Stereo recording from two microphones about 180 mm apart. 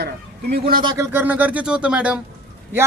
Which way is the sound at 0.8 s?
15° right (ahead or behind).